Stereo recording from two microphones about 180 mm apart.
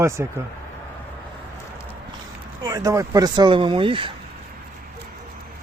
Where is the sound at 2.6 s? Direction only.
20° right (ahead or behind).